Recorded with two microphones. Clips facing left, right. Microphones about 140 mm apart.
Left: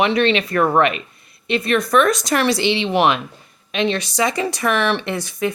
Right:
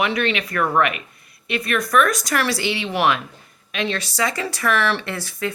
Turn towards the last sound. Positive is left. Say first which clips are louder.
# left 5 dB
turn(degrees=20)  # may be behind; listen again after turning